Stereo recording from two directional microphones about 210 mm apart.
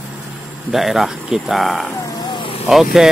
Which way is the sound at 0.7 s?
Centre (ahead or behind).